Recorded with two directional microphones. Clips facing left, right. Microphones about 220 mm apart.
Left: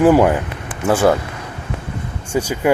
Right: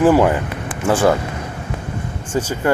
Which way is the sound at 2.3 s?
10° left (ahead or behind).